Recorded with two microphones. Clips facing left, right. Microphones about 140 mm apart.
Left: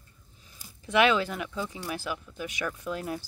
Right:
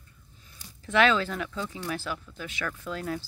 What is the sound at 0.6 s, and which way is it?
Speech, 10° left (ahead or behind).